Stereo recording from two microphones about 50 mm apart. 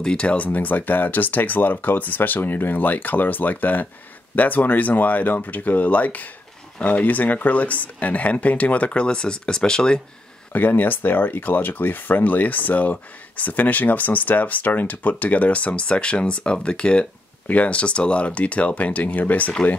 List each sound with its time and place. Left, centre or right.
0.0 s speech: centre
10.5 s speech: left